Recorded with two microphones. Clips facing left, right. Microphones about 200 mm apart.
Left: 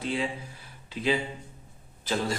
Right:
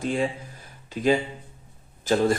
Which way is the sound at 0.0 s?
45° right (ahead or behind).